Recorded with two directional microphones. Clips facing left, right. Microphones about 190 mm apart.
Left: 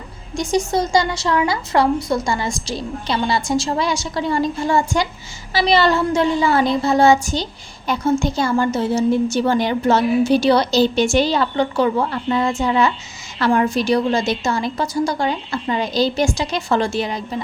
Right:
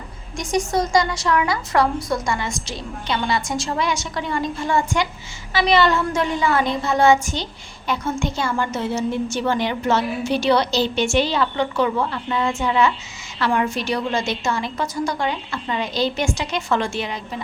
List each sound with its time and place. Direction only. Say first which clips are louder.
0.3 s a woman's voice: left 2 dB; 30° left (ahead or behind)